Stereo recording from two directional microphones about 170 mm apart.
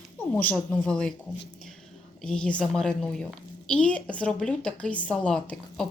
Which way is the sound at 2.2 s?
5° left (ahead or behind).